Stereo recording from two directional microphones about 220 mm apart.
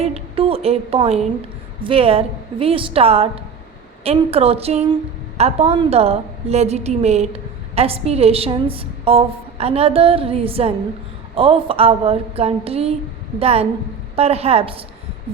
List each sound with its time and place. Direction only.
0.0 s a woman's voice: 25° right (ahead or behind)